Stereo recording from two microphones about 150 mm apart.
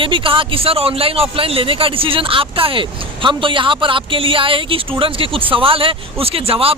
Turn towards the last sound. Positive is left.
turn(degrees=-40)  # may be behind; listen again after turning